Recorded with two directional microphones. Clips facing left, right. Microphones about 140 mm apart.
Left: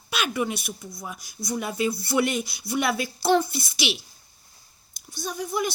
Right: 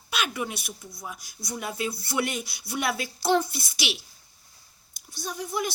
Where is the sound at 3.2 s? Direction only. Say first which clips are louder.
Left 2 dB; 5° left (ahead or behind).